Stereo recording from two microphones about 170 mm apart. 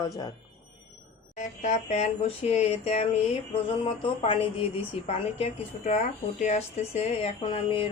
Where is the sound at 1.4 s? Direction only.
45° left (ahead or behind).